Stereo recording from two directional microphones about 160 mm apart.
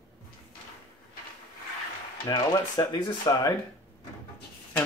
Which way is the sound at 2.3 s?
25° left (ahead or behind).